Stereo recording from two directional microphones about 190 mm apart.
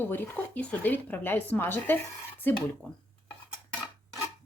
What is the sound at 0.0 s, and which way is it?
Speech, 10° left (ahead or behind).